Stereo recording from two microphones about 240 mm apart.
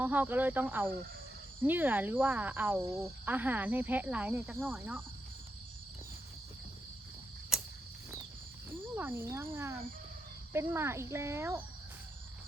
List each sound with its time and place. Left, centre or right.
0.0 s speech: centre
7.5 s cricket: centre
9.0 s speech: centre